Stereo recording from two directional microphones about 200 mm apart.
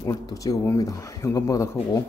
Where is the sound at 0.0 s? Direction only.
15° left (ahead or behind).